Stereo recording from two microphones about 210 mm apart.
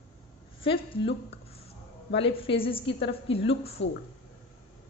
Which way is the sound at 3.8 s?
60° left (ahead or behind).